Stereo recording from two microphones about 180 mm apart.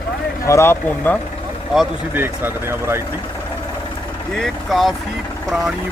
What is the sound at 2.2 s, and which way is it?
Speech, 15° right (ahead or behind).